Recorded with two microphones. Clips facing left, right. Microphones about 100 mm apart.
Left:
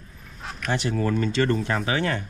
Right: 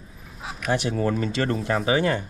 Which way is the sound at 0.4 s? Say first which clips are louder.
Right 2 dB; 5° right (ahead or behind).